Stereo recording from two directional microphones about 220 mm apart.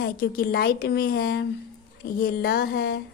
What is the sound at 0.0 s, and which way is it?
Speech, 45° left (ahead or behind).